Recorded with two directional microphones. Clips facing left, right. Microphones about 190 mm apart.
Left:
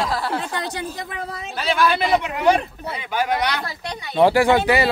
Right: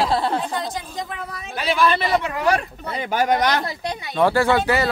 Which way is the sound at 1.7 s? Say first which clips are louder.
Left 1 dB; 10° left (ahead or behind).